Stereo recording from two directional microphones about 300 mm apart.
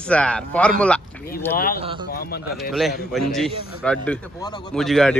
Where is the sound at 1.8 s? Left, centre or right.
Centre.